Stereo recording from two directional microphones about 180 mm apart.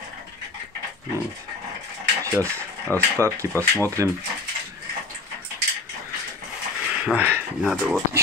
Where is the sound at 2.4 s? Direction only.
10° left (ahead or behind).